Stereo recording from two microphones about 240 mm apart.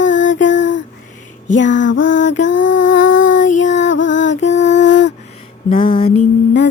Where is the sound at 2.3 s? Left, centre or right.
Left.